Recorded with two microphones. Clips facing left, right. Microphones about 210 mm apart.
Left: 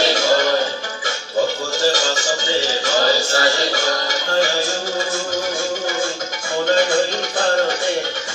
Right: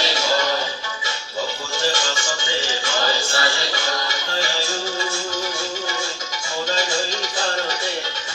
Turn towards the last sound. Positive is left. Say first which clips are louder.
# left 7 dB
turn(degrees=50)  # may be behind; listen again after turning